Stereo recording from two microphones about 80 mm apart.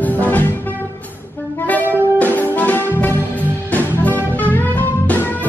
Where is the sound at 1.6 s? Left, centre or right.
Left.